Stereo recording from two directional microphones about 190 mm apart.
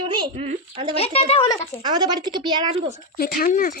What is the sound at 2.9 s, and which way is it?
Speech, 50° left (ahead or behind).